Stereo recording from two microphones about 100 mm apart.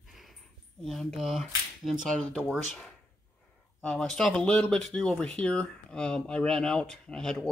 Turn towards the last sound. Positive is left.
turn(degrees=5)  # may be behind; listen again after turning